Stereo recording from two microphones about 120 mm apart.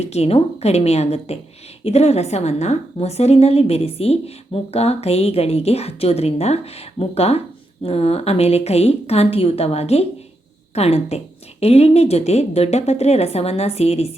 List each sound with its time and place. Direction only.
0.0 s a woman's voice: 60° left (ahead or behind)